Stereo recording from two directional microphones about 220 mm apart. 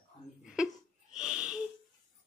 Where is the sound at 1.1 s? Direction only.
5° right (ahead or behind).